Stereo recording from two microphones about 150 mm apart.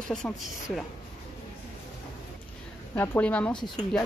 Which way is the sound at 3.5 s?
30° left (ahead or behind).